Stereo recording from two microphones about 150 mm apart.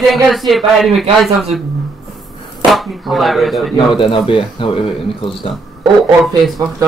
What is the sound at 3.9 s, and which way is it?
Speech, 35° left (ahead or behind).